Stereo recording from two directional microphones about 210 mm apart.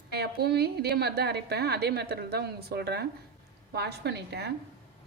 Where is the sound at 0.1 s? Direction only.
50° right (ahead or behind).